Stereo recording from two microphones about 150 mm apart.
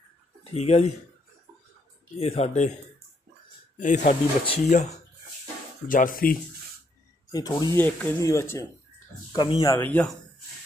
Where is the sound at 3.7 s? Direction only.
55° left (ahead or behind).